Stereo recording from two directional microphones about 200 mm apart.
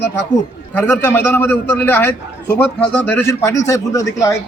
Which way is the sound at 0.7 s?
10° left (ahead or behind).